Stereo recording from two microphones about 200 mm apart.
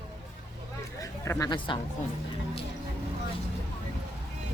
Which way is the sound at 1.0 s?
15° left (ahead or behind).